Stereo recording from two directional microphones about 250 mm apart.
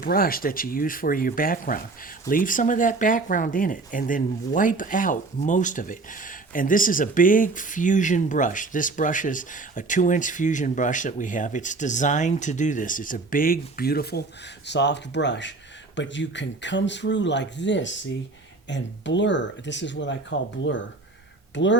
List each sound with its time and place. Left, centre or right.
0.0 s speech: left
21.5 s speech: left